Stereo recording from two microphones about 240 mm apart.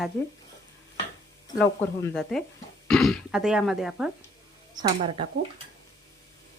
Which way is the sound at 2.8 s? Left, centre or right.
Centre.